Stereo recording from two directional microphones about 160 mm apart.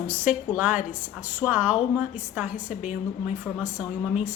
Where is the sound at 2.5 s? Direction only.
50° left (ahead or behind).